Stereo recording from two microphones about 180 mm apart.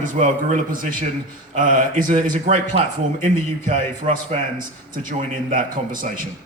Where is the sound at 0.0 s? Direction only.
45° right (ahead or behind).